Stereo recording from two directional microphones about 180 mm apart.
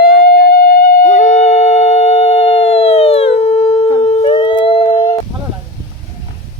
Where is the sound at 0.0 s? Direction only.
60° left (ahead or behind); by 4.9 s 30° left (ahead or behind).